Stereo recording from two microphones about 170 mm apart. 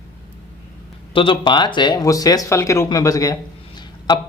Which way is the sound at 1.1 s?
30° left (ahead or behind).